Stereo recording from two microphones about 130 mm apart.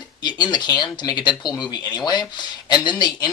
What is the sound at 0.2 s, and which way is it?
Speech, 35° left (ahead or behind).